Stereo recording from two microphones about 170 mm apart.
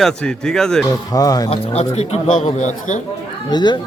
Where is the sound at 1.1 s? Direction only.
20° left (ahead or behind).